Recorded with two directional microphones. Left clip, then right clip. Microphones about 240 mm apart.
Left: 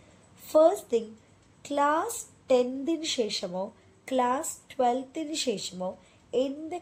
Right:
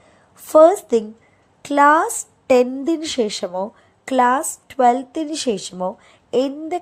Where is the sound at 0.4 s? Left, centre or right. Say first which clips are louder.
Right 10 dB; right.